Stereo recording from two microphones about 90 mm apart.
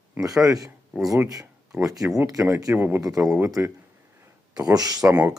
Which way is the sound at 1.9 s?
35° right (ahead or behind).